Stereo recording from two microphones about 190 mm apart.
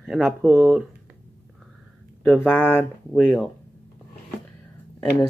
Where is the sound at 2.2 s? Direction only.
5° left (ahead or behind).